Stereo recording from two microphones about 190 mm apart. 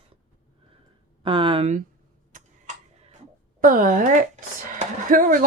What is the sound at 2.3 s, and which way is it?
Tick-tock, 40° right (ahead or behind).